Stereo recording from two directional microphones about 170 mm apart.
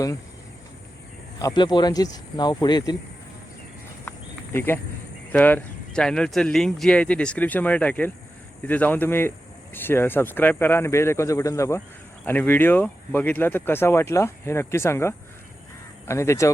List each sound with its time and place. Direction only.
1.4 s speech: 25° left (ahead or behind)
4.5 s speech: 15° left (ahead or behind)